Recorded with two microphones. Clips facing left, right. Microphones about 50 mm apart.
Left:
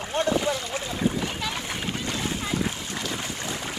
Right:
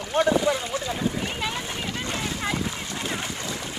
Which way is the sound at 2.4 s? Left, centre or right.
Right.